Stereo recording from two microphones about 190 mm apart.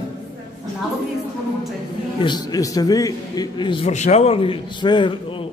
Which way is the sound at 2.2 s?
20° left (ahead or behind).